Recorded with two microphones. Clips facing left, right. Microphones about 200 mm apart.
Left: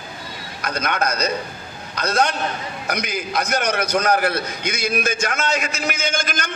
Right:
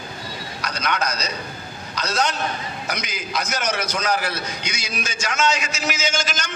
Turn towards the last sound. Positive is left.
turn(degrees=55)  # may be behind; listen again after turning